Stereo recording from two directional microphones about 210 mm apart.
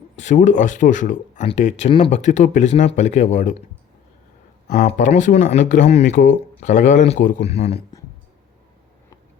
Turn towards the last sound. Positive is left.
turn(degrees=30)  # may be behind; listen again after turning